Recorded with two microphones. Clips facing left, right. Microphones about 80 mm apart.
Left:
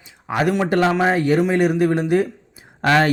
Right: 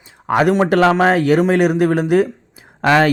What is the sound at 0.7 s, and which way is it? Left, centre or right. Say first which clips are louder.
Speech: right 4 dB; right.